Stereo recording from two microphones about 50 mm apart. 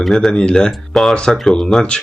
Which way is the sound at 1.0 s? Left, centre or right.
Centre.